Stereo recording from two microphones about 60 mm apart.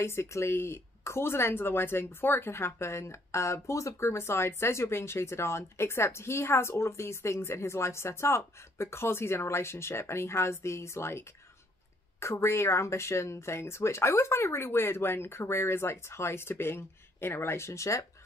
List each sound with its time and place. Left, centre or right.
0.0 s speech: left